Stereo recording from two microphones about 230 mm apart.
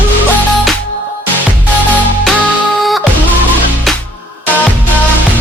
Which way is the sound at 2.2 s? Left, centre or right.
Centre.